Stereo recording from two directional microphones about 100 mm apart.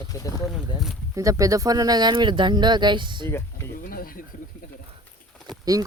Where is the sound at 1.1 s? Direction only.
35° right (ahead or behind); by 3.3 s 50° right (ahead or behind).